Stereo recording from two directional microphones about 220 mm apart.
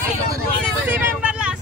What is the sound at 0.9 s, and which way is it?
Speech, 5° right (ahead or behind).